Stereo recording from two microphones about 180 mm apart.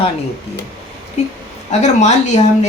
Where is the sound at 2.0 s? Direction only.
40° left (ahead or behind).